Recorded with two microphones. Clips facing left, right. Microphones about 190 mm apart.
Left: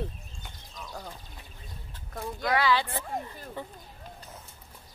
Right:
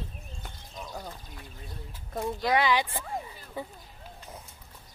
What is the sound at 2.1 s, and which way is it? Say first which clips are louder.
Speech: right 2 dB; 20° right (ahead or behind).